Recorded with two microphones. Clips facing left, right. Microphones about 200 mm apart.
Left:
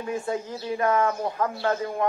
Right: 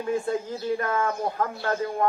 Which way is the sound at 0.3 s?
50° right (ahead or behind).